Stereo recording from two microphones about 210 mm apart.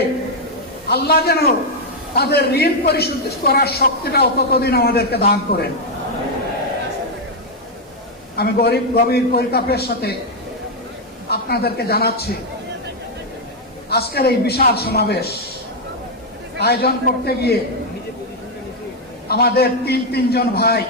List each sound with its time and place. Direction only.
0.9 s a man's voice: 50° left (ahead or behind)
8.4 s a man's voice: 50° left (ahead or behind)
11.3 s a man's voice: 50° left (ahead or behind)
13.9 s a man's voice: 50° left (ahead or behind)
16.6 s a man's voice: 50° left (ahead or behind)
19.3 s a man's voice: 50° left (ahead or behind)